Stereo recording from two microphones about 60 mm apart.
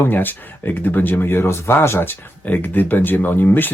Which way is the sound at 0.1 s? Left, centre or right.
Left.